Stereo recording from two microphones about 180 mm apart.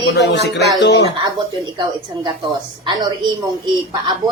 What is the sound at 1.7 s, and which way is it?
A woman's voice, 25° right (ahead or behind).